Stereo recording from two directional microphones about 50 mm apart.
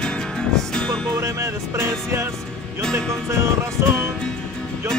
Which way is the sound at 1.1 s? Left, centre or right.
Right.